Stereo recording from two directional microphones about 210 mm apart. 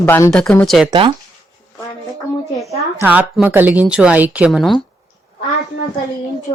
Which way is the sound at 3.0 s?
5° right (ahead or behind).